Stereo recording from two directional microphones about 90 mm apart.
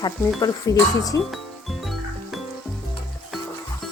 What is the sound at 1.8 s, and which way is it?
Music, centre (ahead or behind).